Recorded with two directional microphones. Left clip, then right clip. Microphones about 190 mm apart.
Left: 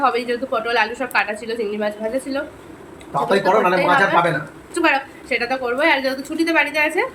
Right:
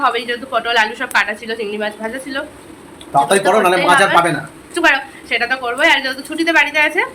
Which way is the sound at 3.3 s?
65° right (ahead or behind).